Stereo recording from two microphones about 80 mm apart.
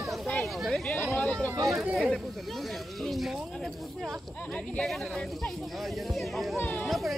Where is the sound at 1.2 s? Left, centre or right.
Centre.